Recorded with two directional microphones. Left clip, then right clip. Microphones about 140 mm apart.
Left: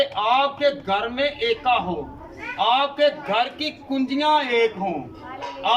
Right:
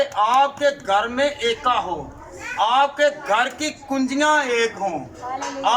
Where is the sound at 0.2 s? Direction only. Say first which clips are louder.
Right 4 dB; 25° left (ahead or behind).